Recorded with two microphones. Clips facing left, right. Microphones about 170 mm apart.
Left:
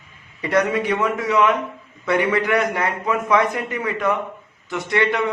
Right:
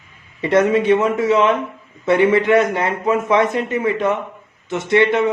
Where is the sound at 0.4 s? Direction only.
25° right (ahead or behind).